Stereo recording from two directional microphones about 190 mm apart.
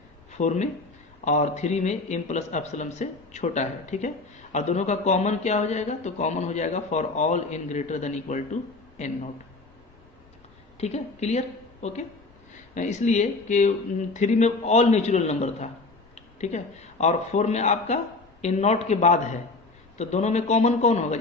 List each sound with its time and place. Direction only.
0.3 s a man's voice: 40° left (ahead or behind)
10.8 s a woman's voice: 35° left (ahead or behind)